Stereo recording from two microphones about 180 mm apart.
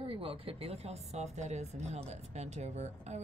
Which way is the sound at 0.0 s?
30° right (ahead or behind).